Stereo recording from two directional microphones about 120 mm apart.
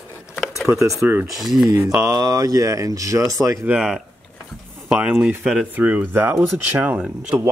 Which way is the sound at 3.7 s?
5° right (ahead or behind).